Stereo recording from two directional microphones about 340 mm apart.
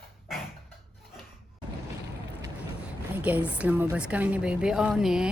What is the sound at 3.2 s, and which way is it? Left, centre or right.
A woman's voice, centre.